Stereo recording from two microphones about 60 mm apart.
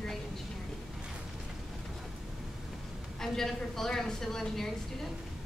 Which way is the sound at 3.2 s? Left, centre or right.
Centre.